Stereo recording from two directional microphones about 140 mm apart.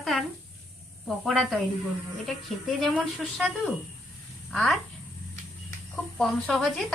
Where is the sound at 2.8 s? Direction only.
Centre (ahead or behind).